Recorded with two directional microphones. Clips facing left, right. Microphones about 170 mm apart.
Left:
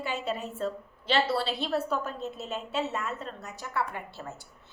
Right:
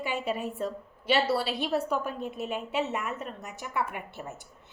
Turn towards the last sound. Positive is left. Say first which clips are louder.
# even
turn(degrees=-15)  # may be behind; listen again after turning